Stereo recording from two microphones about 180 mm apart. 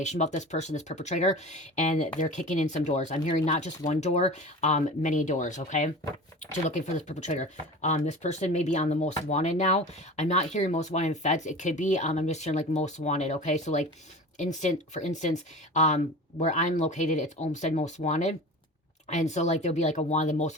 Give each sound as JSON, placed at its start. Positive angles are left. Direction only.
{"t": 0.0, "sound": "speech", "side_deg": 40}